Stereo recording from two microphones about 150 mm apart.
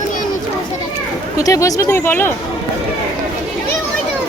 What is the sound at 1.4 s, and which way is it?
Speech, 25° left (ahead or behind).